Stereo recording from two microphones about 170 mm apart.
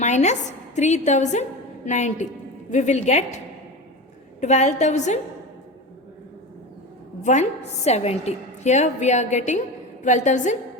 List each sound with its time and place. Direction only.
0.0 s a woman's voice: 45° left (ahead or behind)
7.9 s a woman's voice: 40° left (ahead or behind)